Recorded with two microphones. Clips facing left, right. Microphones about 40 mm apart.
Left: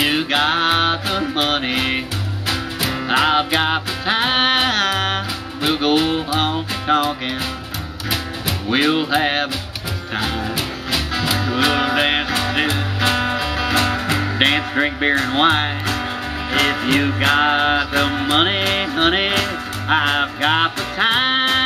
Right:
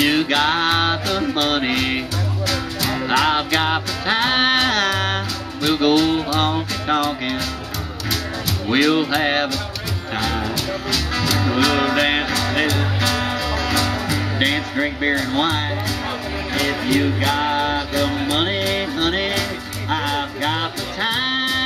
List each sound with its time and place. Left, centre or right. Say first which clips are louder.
0.0 s music: right 1 dB; centre
8.7 s music: even; centre
10.5 s music: even; centre
13.7 s music: left 2 dB; left